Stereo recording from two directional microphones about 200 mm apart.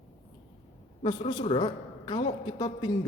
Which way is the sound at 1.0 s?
20° left (ahead or behind).